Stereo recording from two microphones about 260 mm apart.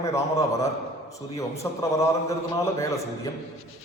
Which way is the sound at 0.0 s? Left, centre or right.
Centre.